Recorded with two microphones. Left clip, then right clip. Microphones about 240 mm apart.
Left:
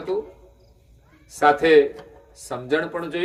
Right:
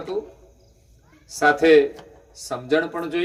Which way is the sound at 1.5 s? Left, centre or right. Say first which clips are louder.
Right 2 dB; right.